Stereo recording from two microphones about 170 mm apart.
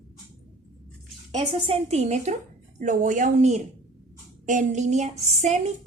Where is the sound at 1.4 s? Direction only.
35° right (ahead or behind).